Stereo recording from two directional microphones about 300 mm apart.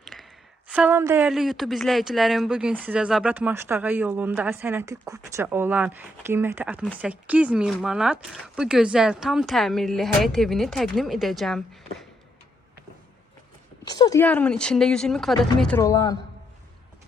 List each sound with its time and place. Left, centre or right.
0.0 s a sound: centre
0.7 s speech: centre
13.8 s speech: centre